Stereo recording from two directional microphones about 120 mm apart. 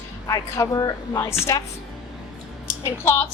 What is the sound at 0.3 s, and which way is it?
Speech, 25° left (ahead or behind).